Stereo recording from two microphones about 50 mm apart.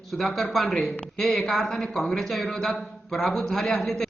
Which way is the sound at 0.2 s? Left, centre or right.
Centre.